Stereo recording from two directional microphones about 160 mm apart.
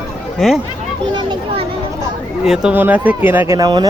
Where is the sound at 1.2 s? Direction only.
30° right (ahead or behind).